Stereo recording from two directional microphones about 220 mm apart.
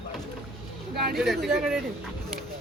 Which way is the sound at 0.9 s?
45° right (ahead or behind).